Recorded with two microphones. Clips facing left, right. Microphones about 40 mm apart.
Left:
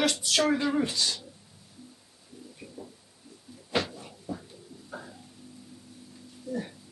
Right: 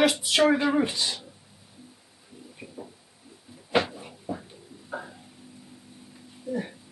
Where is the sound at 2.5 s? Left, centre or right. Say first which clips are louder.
Right 4 dB; right.